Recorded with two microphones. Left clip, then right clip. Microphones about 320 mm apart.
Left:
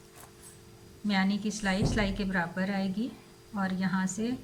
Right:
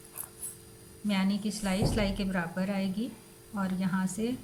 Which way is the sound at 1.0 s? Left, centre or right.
Centre.